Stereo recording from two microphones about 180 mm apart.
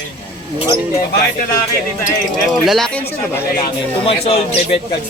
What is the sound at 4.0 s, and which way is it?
Speech, 30° left (ahead or behind).